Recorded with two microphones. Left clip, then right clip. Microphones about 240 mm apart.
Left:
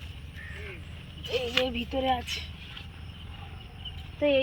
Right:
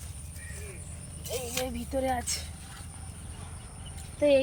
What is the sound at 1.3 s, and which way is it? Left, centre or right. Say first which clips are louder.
Speech: left 6 dB; right.